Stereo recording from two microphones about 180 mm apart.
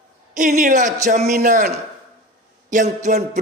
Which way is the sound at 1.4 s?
55° right (ahead or behind).